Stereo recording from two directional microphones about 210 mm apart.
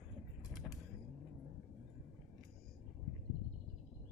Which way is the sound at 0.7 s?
Centre (ahead or behind).